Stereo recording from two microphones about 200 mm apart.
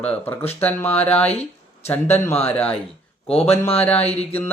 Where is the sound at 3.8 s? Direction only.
10° left (ahead or behind).